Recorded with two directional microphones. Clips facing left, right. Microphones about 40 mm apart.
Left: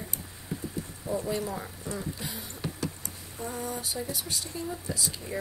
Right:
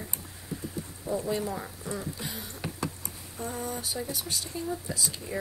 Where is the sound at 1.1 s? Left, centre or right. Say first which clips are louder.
Even; left.